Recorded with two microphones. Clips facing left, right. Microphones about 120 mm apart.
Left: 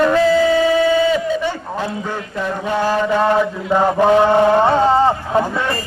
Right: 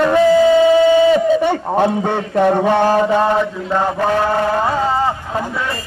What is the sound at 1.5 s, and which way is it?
A man's voice, 60° right (ahead or behind).